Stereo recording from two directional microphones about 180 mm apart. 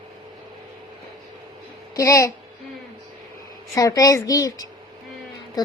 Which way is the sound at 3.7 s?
20° left (ahead or behind).